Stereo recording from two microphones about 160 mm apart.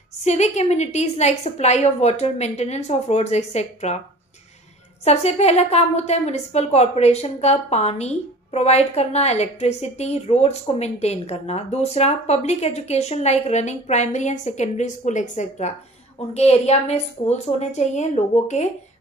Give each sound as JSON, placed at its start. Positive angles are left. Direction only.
{"t": 0.2, "sound": "a woman's voice", "side_deg": 45}
{"t": 5.0, "sound": "a woman's voice", "side_deg": 40}